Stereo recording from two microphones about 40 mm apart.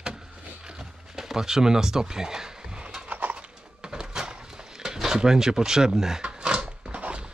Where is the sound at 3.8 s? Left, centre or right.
Centre.